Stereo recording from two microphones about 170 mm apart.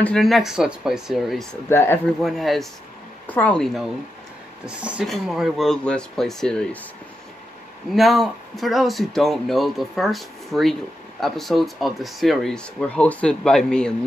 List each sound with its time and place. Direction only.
0.0 s speech: 5° left (ahead or behind)
1.7 s speech: 15° left (ahead or behind)
2.2 s speech: centre (ahead or behind)
7.9 s speech: centre (ahead or behind)